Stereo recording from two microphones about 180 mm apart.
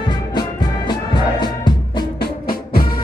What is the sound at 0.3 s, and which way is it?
Music, 25° left (ahead or behind).